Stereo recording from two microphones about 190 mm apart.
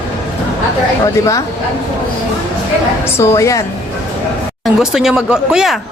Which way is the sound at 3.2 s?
15° left (ahead or behind).